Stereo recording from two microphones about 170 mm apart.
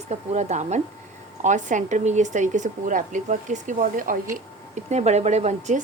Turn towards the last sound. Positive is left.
turn(degrees=-45)  # may be behind; listen again after turning